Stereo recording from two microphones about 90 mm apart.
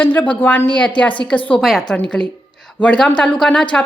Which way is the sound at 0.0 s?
20° left (ahead or behind).